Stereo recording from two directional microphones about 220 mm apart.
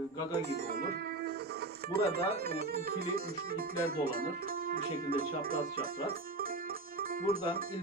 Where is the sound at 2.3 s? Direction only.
45° right (ahead or behind).